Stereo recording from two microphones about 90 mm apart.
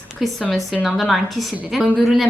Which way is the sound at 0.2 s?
Centre (ahead or behind).